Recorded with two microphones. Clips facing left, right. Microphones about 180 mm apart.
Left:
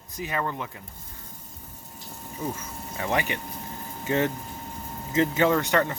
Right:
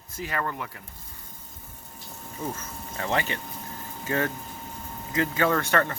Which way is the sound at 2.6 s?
15° left (ahead or behind).